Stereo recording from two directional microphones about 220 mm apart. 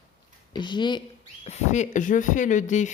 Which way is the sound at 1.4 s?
30° left (ahead or behind).